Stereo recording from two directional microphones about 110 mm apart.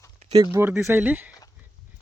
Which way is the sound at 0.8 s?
15° right (ahead or behind).